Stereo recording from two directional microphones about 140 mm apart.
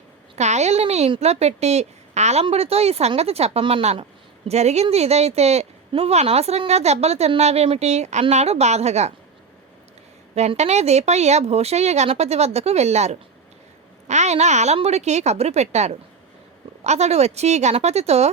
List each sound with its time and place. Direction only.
0.3 s a woman's voice: 55° right (ahead or behind)
10.3 s a woman's voice: 50° right (ahead or behind)